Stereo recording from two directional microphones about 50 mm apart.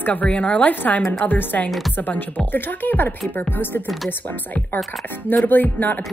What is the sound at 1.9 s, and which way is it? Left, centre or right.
Speech, left.